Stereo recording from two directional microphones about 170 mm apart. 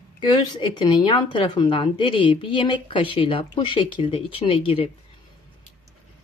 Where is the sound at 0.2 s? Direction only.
25° left (ahead or behind).